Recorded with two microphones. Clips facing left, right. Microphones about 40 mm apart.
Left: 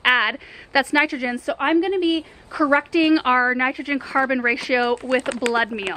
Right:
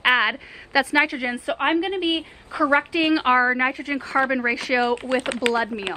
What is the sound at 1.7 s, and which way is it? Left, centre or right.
Speech, right.